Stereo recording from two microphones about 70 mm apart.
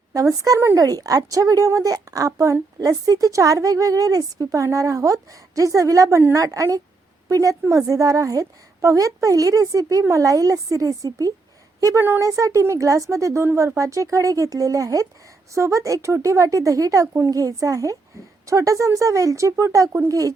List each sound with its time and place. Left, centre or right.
0.1 s speech: right
0.8 s a woman's voice: right